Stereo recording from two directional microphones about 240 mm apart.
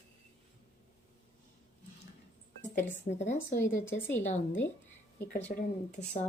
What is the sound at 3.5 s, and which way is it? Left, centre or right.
Speech, centre.